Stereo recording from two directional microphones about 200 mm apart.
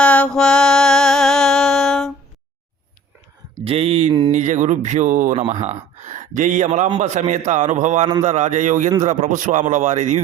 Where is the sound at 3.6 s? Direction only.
30° right (ahead or behind).